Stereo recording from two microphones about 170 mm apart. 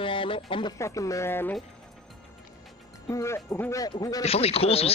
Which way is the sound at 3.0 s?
20° left (ahead or behind).